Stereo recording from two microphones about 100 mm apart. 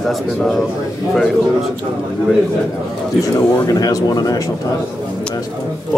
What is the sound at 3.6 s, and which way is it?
Speech, 40° left (ahead or behind).